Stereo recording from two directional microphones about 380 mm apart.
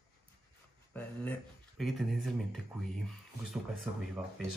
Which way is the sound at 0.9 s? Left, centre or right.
Centre.